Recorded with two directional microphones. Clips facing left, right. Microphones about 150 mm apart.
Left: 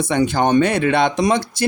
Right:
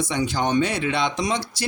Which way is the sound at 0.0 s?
55° left (ahead or behind).